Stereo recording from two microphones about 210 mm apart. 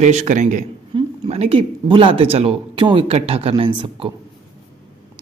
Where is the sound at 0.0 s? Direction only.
35° right (ahead or behind).